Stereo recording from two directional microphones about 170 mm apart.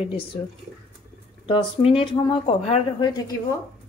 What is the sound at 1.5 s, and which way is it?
Speech, 35° left (ahead or behind).